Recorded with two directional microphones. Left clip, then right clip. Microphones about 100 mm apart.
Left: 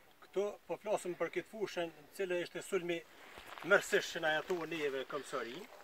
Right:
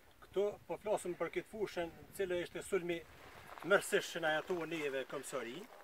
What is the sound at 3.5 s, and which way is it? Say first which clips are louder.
Speech: left 2 dB; centre (ahead or behind).